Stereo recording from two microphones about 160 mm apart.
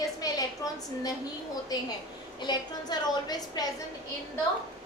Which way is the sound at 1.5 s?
25° left (ahead or behind).